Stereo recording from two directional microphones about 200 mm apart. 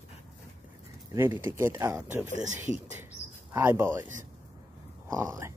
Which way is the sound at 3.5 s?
10° right (ahead or behind).